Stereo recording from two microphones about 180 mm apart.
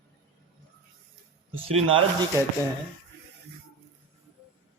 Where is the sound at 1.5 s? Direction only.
30° right (ahead or behind).